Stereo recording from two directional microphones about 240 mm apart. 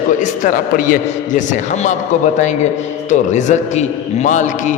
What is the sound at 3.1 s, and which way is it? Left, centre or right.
A man's voice, left.